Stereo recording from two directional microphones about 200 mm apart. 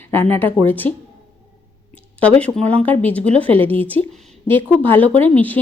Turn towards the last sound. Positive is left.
turn(degrees=10)  # may be behind; listen again after turning